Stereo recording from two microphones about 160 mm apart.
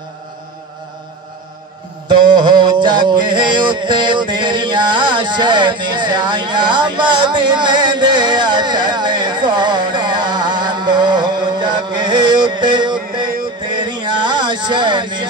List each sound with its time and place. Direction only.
2.0 s mantra: 30° right (ahead or behind)
13.7 s music: 30° right (ahead or behind)